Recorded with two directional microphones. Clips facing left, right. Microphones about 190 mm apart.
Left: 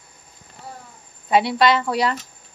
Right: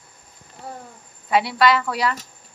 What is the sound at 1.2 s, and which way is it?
Speech, 25° left (ahead or behind).